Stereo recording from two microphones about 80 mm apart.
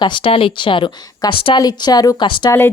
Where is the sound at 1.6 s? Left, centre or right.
Left.